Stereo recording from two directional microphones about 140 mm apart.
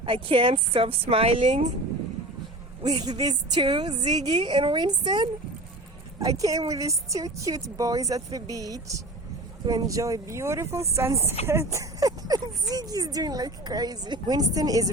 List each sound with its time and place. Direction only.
0.0 s a woman's voice: 40° right (ahead or behind)
2.8 s a woman's voice: 30° right (ahead or behind)